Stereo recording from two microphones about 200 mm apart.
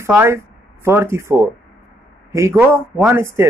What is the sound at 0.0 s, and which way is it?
Speech, 15° right (ahead or behind).